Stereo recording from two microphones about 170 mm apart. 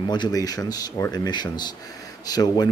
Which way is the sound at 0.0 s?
25° left (ahead or behind).